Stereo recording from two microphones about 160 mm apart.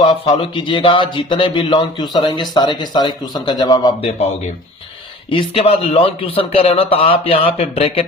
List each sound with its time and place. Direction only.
0.0 s speech: 35° left (ahead or behind)
5.3 s a man's voice: 35° left (ahead or behind)